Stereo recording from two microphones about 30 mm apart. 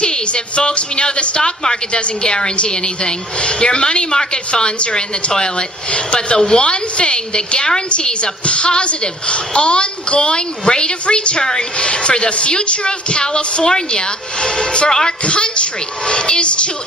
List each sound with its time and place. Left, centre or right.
0.0 s speech: left
1.4 s a woman's voice: left
1.9 s a woman's voice: left
11.4 s a woman's voice: left
15.2 s speech: left